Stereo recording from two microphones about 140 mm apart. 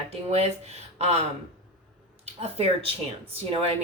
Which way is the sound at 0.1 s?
50° right (ahead or behind).